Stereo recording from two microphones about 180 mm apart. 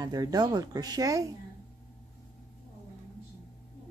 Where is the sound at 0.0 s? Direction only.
20° right (ahead or behind).